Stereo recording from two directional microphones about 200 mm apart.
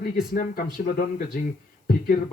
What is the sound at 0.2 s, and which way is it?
Speech, 45° left (ahead or behind).